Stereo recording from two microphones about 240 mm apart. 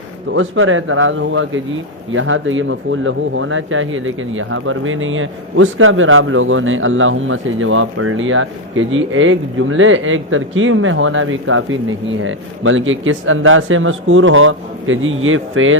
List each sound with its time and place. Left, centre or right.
0.3 s speech: right